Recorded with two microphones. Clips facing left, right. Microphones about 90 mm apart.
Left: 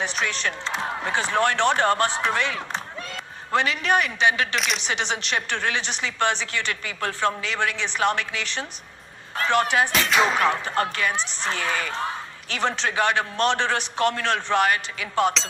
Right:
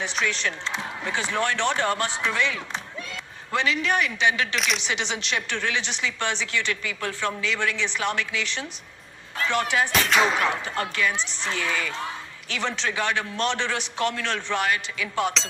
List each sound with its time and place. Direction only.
0.0 s a woman's voice: 50° left (ahead or behind)
4.5 s music: centre (ahead or behind)
4.9 s a woman's voice: 45° left (ahead or behind)
9.9 s music: centre (ahead or behind)
10.8 s a woman's voice: 45° left (ahead or behind)